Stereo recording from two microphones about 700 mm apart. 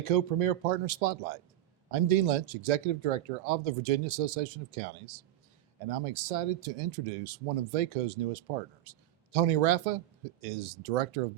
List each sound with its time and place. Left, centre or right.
0.0 s speech: right